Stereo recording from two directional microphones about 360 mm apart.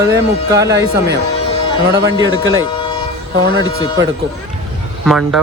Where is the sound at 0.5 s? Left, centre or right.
Right.